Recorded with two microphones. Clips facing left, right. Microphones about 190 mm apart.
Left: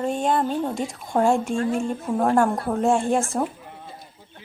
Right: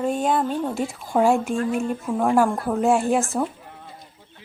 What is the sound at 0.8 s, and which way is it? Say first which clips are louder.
Speech: right 1 dB; 5° right (ahead or behind).